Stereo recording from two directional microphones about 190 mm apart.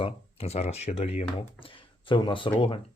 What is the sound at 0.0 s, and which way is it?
Speech, 30° left (ahead or behind).